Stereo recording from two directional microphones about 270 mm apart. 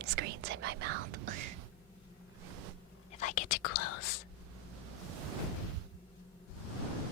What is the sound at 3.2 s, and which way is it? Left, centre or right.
Whispering, left.